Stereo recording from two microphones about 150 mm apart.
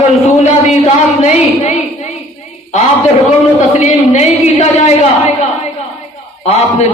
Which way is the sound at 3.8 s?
50° left (ahead or behind).